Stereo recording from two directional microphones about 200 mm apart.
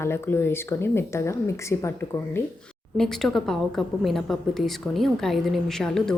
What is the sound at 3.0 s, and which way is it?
A woman's voice, centre (ahead or behind).